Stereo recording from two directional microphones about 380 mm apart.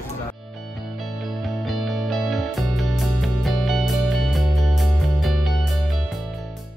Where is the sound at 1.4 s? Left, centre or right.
Centre.